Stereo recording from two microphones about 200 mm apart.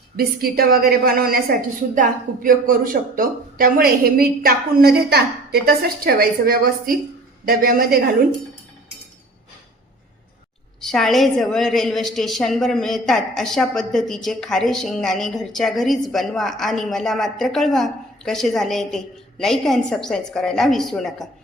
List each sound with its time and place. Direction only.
0.2 s a woman's voice: 50° right (ahead or behind)
10.8 s a woman's voice: centre (ahead or behind)